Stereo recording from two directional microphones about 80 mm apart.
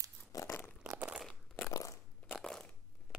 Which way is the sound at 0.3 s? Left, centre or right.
Left.